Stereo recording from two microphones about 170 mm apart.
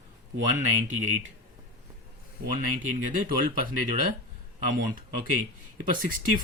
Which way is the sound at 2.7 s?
45° right (ahead or behind).